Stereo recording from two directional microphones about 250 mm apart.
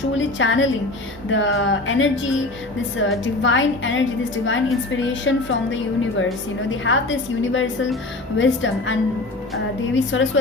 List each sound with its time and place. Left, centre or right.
0.2 s a woman's voice: left
3.4 s a woman's voice: left